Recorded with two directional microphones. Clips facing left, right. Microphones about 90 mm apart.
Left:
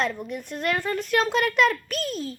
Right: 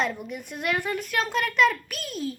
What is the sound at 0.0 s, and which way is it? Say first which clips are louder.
A woman's voice: left 1 dB; 5° right (ahead or behind).